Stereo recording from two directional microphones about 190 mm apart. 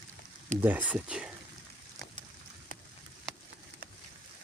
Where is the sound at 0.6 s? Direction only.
10° right (ahead or behind).